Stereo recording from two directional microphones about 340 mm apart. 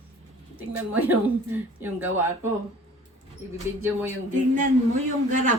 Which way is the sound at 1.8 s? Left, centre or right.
Centre.